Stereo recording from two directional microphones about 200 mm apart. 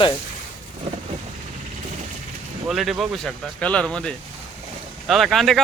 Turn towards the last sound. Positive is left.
turn(degrees=0)  # may be behind; listen again after turning